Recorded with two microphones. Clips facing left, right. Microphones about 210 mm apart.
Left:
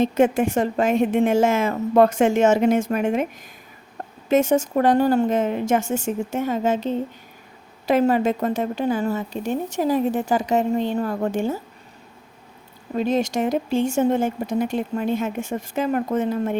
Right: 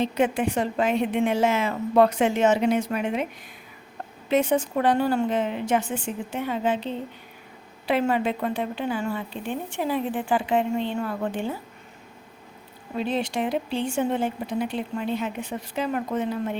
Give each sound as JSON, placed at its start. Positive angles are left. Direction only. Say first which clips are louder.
{"t": 0.0, "sound": "a woman's voice", "louder": "left 5 dB", "side_deg": 45}
{"t": 4.3, "sound": "a woman's voice", "louder": "left 4 dB", "side_deg": 45}
{"t": 13.0, "sound": "a woman's voice", "louder": "left 5 dB", "side_deg": 45}